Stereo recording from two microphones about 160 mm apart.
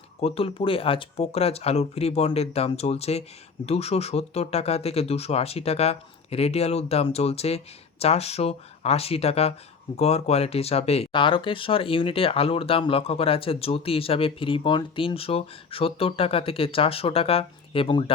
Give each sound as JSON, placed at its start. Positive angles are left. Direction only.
{"t": 0.2, "sound": "speech", "side_deg": 40}